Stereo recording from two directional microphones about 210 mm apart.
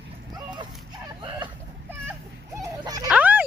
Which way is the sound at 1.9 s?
10° right (ahead or behind).